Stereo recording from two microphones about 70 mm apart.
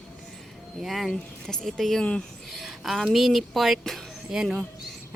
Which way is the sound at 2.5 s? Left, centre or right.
Centre.